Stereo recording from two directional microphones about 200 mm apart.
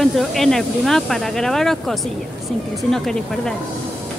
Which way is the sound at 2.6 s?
Centre (ahead or behind).